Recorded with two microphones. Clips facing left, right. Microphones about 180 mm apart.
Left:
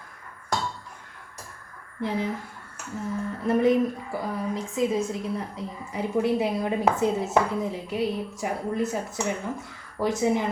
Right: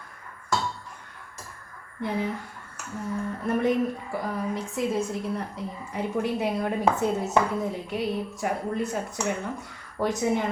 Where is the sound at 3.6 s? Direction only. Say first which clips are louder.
Left 3 dB; centre (ahead or behind).